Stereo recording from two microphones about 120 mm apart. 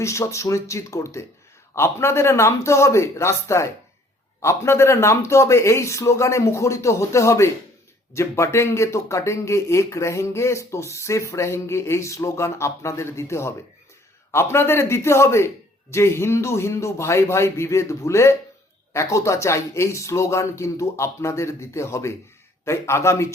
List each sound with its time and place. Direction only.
0.0 s speech: 25° left (ahead or behind)